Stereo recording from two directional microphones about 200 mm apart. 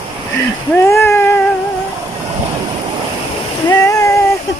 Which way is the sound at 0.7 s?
15° left (ahead or behind).